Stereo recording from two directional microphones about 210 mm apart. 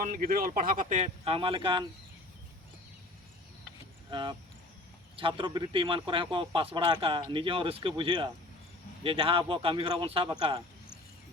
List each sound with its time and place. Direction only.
0.0 s speech: 40° right (ahead or behind); by 1.9 s 25° right (ahead or behind)
4.1 s speech: 20° right (ahead or behind)